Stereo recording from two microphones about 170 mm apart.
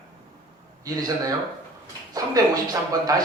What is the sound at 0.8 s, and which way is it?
Speech, 20° right (ahead or behind).